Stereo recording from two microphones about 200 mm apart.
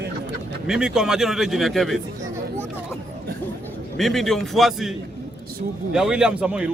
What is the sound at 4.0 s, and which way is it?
Speech, centre (ahead or behind).